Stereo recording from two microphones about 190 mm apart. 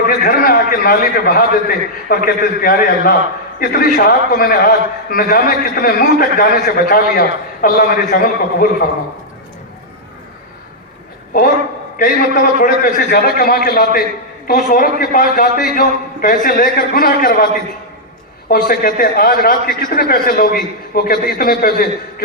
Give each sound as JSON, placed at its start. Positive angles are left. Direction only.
{"t": 0.1, "sound": "a man's voice", "side_deg": 55}
{"t": 11.9, "sound": "a man's voice", "side_deg": 50}